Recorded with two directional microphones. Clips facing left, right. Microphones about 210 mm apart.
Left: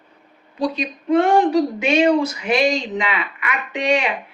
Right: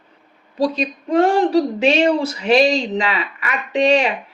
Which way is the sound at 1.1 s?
35° right (ahead or behind).